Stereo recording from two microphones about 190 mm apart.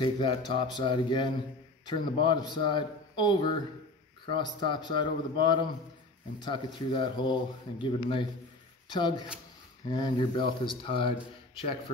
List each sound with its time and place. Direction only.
0.0 s a man's voice: 25° left (ahead or behind)